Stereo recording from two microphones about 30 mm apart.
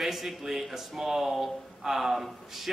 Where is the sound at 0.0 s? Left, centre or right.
Centre.